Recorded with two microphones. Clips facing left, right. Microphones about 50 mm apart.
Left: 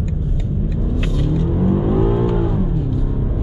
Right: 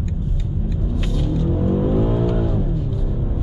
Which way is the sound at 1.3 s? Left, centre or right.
Centre.